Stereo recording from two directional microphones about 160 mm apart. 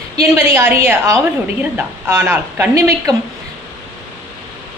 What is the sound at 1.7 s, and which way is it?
A woman's voice, 15° right (ahead or behind).